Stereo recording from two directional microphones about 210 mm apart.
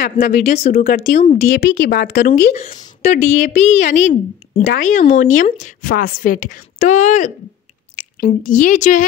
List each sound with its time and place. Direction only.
0.0 s a woman's voice: 35° left (ahead or behind)
1.5 s a woman's voice: 55° left (ahead or behind); by 9.0 s 35° left (ahead or behind)